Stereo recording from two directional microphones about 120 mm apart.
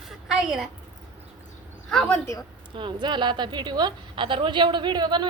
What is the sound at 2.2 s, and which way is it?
Speech, 25° left (ahead or behind).